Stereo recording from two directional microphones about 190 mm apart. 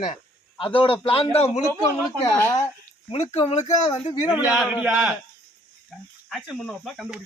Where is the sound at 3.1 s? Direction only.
35° left (ahead or behind).